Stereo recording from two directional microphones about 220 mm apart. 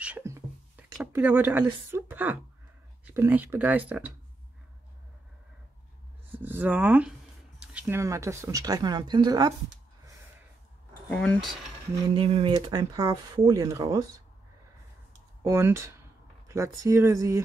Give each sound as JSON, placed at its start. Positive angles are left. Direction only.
{"t": 0.0, "sound": "a sound", "side_deg": -10}
{"t": 0.9, "sound": "speech", "side_deg": -10}
{"t": 6.3, "sound": "speech", "side_deg": -10}
{"t": 11.1, "sound": "speech", "side_deg": 0}
{"t": 12.1, "sound": "speech", "side_deg": -25}
{"t": 15.4, "sound": "speech", "side_deg": -10}